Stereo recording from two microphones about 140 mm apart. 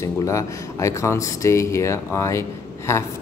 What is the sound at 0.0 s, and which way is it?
A man's voice, 20° left (ahead or behind).